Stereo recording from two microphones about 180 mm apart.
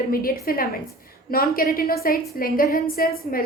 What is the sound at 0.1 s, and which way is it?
A woman's voice, 55° left (ahead or behind).